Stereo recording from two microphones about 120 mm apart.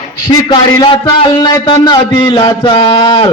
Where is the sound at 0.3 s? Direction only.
40° left (ahead or behind).